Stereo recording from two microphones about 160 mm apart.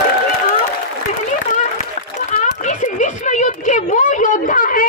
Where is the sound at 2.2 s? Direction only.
50° left (ahead or behind).